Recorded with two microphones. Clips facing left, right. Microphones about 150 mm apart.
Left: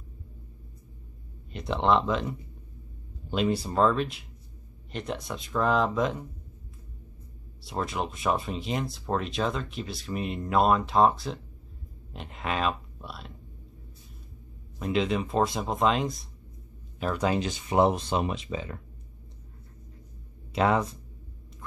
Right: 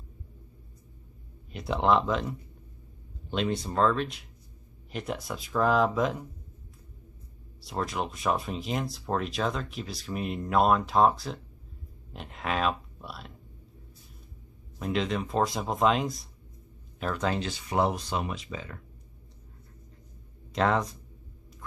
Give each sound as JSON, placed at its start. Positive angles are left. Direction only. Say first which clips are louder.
{"t": 1.5, "sound": "speech", "louder": "even", "side_deg": 0}
{"t": 7.6, "sound": "speech", "louder": "left 1 dB", "side_deg": 0}
{"t": 14.8, "sound": "speech", "louder": "left 2 dB", "side_deg": 0}
{"t": 17.0, "sound": "speech", "louder": "left 3 dB", "side_deg": 10}
{"t": 20.5, "sound": "speech", "louder": "left 1 dB", "side_deg": 5}